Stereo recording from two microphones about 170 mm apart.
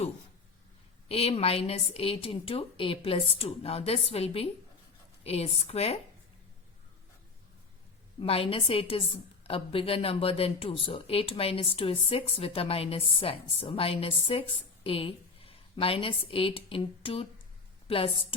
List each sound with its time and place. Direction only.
1.0 s a woman's voice: 35° left (ahead or behind)
8.2 s a woman's voice: 35° left (ahead or behind)